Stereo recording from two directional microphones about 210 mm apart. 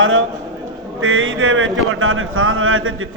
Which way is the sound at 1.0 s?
70° right (ahead or behind).